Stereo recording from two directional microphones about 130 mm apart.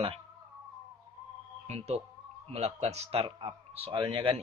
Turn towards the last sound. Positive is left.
turn(degrees=-40)  # may be behind; listen again after turning